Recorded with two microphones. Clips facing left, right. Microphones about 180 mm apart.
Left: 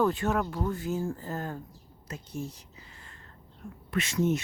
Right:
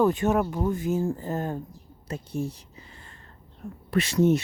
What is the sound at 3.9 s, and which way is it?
Speech, 35° right (ahead or behind).